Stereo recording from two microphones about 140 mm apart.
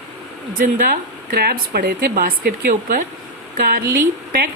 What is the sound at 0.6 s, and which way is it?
Speech, 80° right.